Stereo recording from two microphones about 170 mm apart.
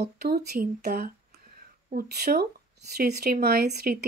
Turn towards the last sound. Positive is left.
turn(degrees=-60)  # may be behind; listen again after turning